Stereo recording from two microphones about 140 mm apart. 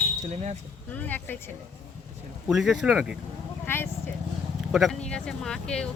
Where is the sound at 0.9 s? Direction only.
10° left (ahead or behind).